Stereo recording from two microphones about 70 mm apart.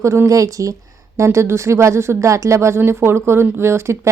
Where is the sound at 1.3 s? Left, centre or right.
Right.